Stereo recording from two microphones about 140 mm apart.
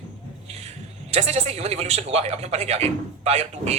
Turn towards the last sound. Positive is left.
turn(degrees=-50)  # may be behind; listen again after turning